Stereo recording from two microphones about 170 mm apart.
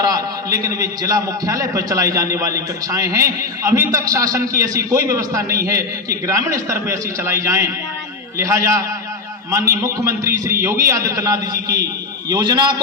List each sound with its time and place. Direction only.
0.0 s a man's voice: 20° right (ahead or behind)